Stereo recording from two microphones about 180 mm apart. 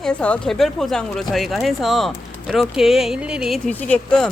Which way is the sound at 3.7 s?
10° left (ahead or behind).